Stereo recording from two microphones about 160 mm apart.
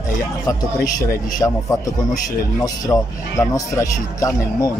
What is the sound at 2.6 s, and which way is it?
Speech, 20° left (ahead or behind).